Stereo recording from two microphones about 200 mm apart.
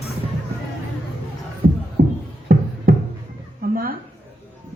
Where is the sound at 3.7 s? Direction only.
45° right (ahead or behind).